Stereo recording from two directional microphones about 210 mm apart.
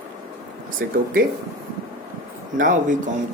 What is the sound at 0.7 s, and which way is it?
Speech, 40° right (ahead or behind).